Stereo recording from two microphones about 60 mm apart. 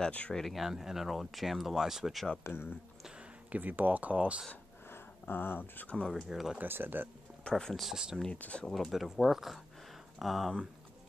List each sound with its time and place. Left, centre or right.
0.3 s speech: centre
0.6 s speech: centre
2.4 s speech: left
3.5 s speech: right
5.3 s speech: left
6.0 s speech: centre
6.6 s speech: right
7.4 s speech: centre
7.8 s speech: centre
8.4 s speech: left
8.7 s speech: centre